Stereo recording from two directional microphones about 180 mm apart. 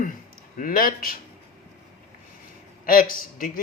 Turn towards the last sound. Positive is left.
turn(degrees=50)  # may be behind; listen again after turning